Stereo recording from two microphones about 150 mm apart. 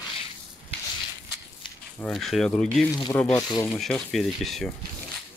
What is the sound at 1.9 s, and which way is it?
Speech, 5° left (ahead or behind).